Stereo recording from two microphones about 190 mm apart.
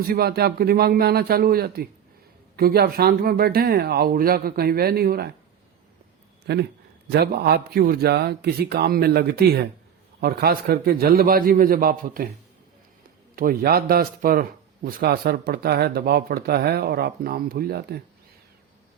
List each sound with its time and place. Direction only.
0.1 s speech: 55° right (ahead or behind)
6.5 s speech: 60° right (ahead or behind)
13.3 s speech: 50° right (ahead or behind)